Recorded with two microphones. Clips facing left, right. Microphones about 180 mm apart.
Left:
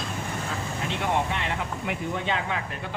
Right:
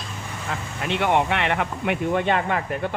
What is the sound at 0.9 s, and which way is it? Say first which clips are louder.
Speech: right 7 dB; 70° right (ahead or behind).